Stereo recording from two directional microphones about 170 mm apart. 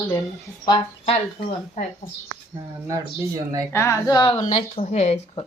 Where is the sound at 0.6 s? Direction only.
25° left (ahead or behind).